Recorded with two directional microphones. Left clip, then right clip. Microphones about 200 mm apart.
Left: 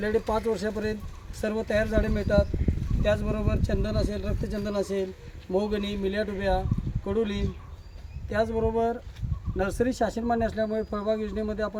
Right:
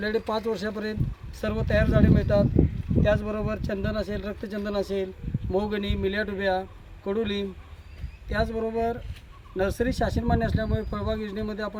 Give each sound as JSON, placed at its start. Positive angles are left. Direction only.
{"t": 0.0, "sound": "speech", "side_deg": 5}